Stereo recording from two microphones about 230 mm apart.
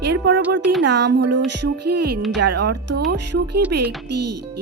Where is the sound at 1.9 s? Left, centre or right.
Right.